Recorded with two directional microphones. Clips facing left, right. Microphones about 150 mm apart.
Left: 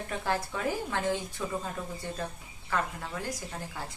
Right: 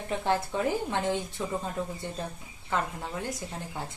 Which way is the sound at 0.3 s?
25° right (ahead or behind).